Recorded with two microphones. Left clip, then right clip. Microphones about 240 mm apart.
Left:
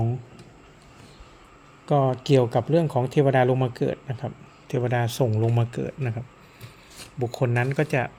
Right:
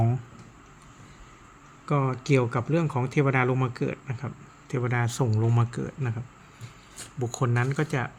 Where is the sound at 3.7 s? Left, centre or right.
Centre.